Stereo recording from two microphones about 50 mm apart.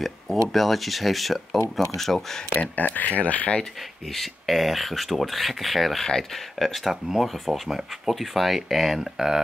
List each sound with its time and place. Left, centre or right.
0.5 s speech: centre
2.5 s speech: left
4.1 s speech: centre